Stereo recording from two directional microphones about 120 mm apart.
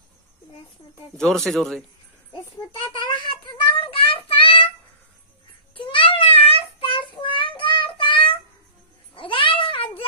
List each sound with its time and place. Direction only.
1.1 s speech: 5° left (ahead or behind)
2.9 s a child's voice: 40° left (ahead or behind)
3.7 s child singing: 45° left (ahead or behind)
5.8 s child singing: 45° left (ahead or behind)
9.1 s a sound: 45° left (ahead or behind)